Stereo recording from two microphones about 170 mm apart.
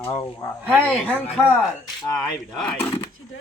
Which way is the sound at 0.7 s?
10° left (ahead or behind).